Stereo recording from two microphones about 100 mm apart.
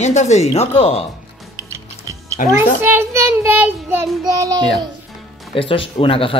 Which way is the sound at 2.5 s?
20° right (ahead or behind).